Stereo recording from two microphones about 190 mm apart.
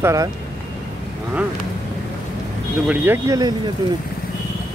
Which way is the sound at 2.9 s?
15° right (ahead or behind).